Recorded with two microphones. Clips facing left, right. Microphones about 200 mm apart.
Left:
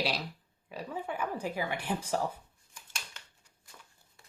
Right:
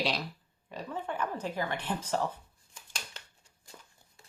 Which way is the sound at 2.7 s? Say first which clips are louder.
Right 2 dB; 30° right (ahead or behind).